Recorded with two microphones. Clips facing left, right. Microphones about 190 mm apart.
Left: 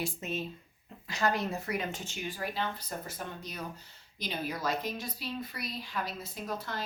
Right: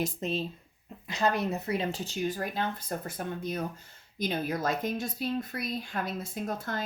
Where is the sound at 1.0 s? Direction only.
20° right (ahead or behind).